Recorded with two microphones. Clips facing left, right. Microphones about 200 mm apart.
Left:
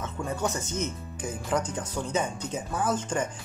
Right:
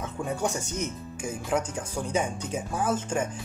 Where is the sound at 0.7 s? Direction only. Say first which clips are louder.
Even; 10° right (ahead or behind).